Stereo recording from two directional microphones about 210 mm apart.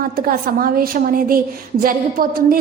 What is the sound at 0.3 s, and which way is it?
A woman's voice, 45° right (ahead or behind).